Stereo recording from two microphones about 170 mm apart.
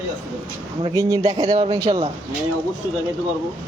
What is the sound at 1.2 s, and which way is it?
Speech, 35° right (ahead or behind).